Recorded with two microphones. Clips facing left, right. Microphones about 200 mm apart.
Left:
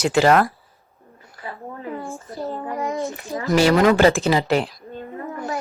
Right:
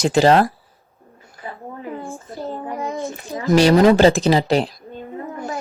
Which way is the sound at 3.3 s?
20° right (ahead or behind).